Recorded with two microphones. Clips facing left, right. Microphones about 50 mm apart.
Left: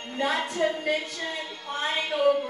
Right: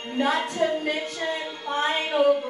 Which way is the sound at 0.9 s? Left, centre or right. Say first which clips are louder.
Right 3 dB; right.